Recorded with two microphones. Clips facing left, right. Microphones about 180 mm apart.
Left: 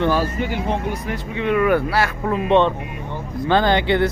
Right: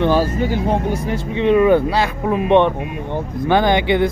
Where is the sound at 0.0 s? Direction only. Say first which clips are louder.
Right 4 dB; 30° right (ahead or behind).